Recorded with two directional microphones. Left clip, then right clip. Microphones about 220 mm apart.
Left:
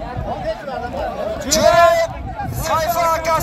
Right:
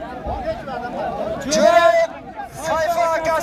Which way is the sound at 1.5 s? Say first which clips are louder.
Left 1 dB; 50° left (ahead or behind).